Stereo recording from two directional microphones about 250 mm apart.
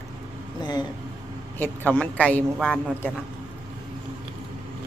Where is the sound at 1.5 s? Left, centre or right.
Centre.